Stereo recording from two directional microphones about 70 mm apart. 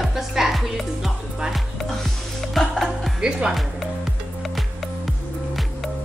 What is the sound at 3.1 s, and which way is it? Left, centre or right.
Speech, centre.